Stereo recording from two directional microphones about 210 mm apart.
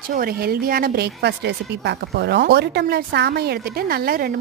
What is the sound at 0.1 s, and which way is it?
A woman's voice, 45° right (ahead or behind).